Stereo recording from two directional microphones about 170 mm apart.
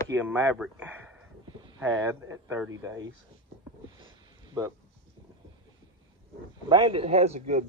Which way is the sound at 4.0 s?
20° right (ahead or behind).